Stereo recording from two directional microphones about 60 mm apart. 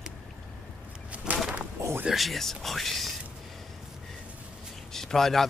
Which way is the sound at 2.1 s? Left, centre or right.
Centre.